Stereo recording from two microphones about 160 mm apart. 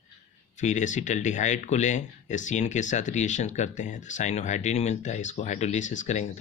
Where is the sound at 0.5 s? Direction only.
50° left (ahead or behind).